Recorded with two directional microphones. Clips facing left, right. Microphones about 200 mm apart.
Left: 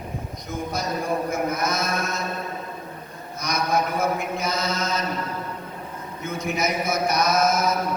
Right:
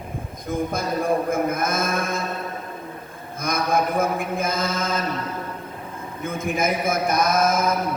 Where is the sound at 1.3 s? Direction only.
50° right (ahead or behind).